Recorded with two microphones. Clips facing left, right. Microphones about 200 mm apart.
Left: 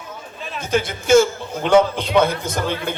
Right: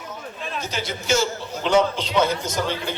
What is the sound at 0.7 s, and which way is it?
A man's voice, 55° left (ahead or behind).